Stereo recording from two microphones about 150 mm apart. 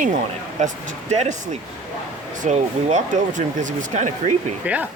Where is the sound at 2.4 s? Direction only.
55° right (ahead or behind).